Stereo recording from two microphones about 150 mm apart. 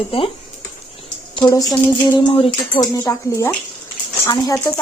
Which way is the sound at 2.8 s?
20° left (ahead or behind).